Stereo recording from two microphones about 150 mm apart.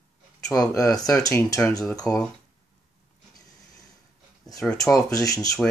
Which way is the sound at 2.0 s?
5° left (ahead or behind).